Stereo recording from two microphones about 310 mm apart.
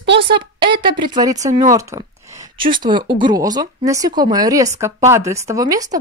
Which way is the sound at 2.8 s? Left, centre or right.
Centre.